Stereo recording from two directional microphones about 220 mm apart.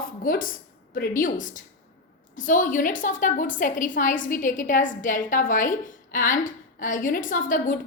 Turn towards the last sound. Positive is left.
turn(degrees=35)  # may be behind; listen again after turning